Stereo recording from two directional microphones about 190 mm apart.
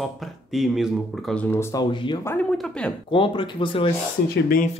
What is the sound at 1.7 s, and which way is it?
Speech, 25° left (ahead or behind).